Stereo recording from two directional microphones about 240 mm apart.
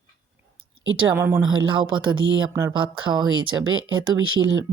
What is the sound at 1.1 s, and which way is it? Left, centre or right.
Speech, centre.